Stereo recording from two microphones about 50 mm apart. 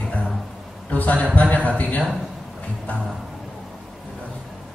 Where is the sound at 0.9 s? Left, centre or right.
Left.